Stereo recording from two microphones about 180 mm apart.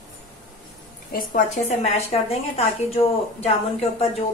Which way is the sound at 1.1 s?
50° left (ahead or behind).